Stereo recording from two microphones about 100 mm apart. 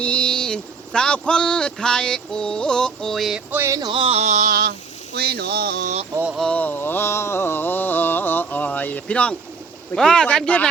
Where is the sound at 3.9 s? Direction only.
65° right (ahead or behind); by 4.3 s 80° right.